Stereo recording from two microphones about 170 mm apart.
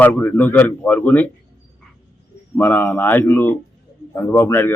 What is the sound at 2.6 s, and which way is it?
A man's voice, 10° left (ahead or behind).